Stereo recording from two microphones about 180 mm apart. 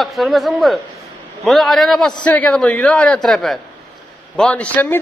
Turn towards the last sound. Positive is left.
turn(degrees=10)  # may be behind; listen again after turning